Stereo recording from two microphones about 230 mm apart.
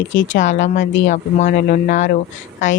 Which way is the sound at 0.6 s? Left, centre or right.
Left.